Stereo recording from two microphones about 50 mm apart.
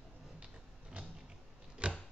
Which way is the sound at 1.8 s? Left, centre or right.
Right.